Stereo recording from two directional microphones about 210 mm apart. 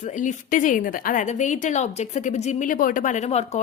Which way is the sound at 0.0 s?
35° left (ahead or behind).